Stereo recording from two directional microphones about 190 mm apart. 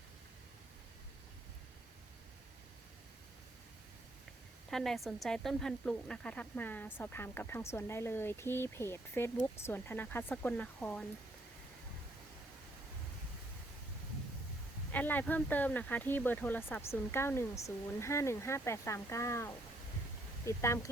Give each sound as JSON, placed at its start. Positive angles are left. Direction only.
{"t": 4.7, "sound": "speech", "side_deg": 0}
{"t": 14.9, "sound": "speech", "side_deg": 10}